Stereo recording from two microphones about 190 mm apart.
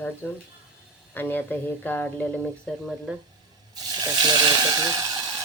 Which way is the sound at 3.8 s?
20° right (ahead or behind).